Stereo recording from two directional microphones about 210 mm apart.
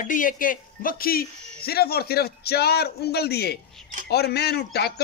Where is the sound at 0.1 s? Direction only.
40° left (ahead or behind).